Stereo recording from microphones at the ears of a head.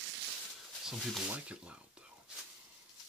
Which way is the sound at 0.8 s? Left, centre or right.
Centre.